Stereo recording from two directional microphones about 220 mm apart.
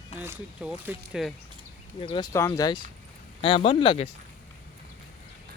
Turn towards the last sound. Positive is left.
turn(degrees=25)  # may be behind; listen again after turning